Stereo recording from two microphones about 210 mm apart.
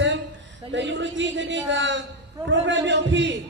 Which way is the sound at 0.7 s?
60° right (ahead or behind).